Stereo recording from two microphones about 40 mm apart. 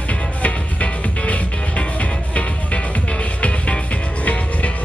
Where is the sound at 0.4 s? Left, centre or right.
Left.